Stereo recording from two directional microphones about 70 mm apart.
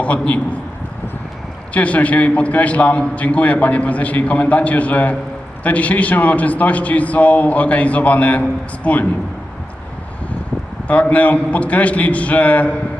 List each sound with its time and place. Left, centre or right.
0.0 s a man's voice: centre
1.7 s a man's voice: centre
10.8 s a man's voice: left